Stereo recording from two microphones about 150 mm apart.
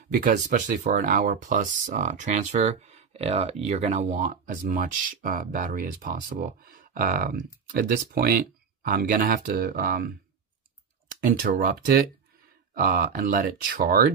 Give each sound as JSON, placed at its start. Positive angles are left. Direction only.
{"t": 0.1, "sound": "speech", "side_deg": -60}
{"t": 11.1, "sound": "speech", "side_deg": -70}
{"t": 12.7, "sound": "speech", "side_deg": -70}